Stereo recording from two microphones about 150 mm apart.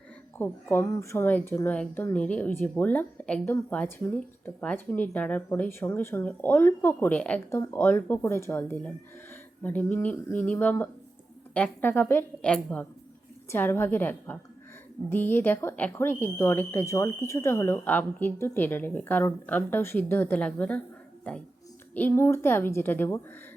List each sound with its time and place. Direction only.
0.3 s speech: 15° left (ahead or behind)
21.9 s speech: 15° left (ahead or behind)